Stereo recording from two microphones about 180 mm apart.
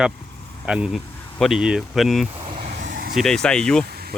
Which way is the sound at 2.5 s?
40° right (ahead or behind).